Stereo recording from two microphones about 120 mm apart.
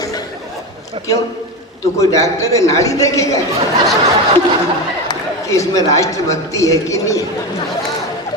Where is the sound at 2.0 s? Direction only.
25° left (ahead or behind).